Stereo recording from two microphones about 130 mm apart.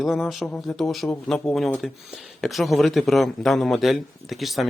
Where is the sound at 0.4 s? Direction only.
10° left (ahead or behind).